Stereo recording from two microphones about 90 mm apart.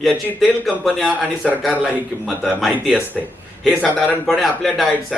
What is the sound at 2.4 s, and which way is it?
A man's voice, centre (ahead or behind).